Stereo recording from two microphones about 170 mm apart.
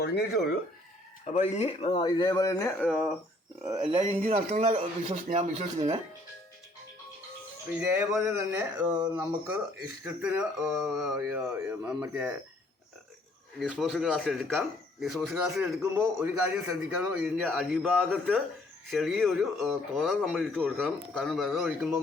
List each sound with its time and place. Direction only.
0.0 s speech: 70° left (ahead or behind)
1.3 s speech: 40° left (ahead or behind); by 2.7 s 20° left (ahead or behind)
2.7 s speech: centre (ahead or behind)
3.9 s speech: 35° right (ahead or behind)
7.7 s a man's voice: 10° right (ahead or behind)
13.6 s speech: centre (ahead or behind)
15.8 s a man's voice: 15° right (ahead or behind)
18.1 s speech: 5° left (ahead or behind)